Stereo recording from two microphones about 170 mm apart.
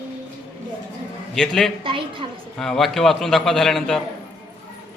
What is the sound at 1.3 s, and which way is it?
Speech, centre (ahead or behind).